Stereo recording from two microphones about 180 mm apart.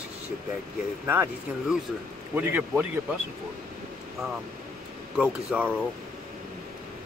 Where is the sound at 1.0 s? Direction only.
10° right (ahead or behind).